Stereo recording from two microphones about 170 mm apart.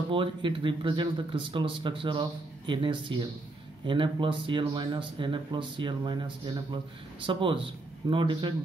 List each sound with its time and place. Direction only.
0.1 s speech: 30° right (ahead or behind)